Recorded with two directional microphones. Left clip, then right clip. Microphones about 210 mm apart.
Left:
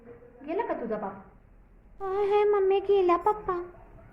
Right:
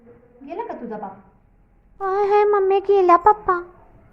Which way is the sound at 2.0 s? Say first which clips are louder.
Right 8 dB; 15° right (ahead or behind).